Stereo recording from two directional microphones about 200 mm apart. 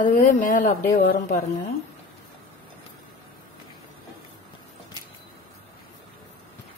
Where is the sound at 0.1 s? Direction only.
40° left (ahead or behind).